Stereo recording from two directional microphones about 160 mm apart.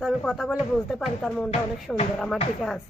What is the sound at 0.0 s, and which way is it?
Speech, centre (ahead or behind).